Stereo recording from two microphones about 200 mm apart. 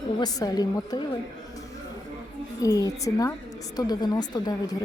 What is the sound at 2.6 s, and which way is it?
A woman's voice, 15° left (ahead or behind).